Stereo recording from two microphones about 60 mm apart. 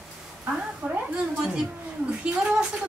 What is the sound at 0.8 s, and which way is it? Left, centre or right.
Speech, centre.